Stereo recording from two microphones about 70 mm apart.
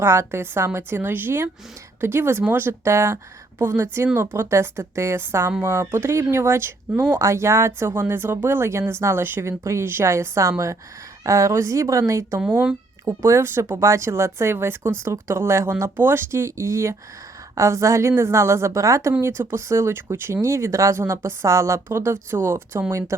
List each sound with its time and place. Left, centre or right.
0.0 s a woman's voice: right
19.2 s a woman's voice: right